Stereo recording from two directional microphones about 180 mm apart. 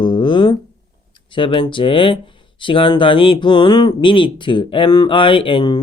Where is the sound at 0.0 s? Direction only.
25° left (ahead or behind).